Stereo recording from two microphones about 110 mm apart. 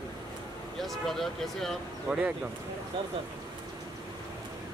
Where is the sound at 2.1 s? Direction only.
10° right (ahead or behind).